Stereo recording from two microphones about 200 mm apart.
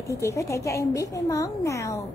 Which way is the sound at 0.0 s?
15° left (ahead or behind).